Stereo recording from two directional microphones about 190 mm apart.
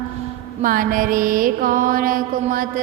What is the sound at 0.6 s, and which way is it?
Mantra, 45° right (ahead or behind).